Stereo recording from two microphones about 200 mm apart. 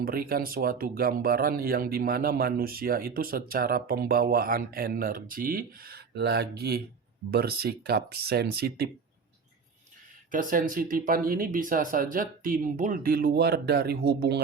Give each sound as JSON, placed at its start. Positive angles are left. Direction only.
{"t": 0.0, "sound": "speech", "side_deg": -50}
{"t": 10.3, "sound": "speech", "side_deg": -45}